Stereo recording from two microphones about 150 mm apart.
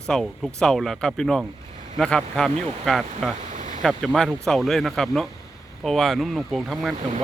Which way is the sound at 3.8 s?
Centre (ahead or behind).